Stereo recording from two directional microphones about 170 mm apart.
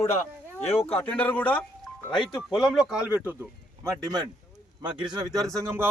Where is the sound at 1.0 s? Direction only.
10° left (ahead or behind).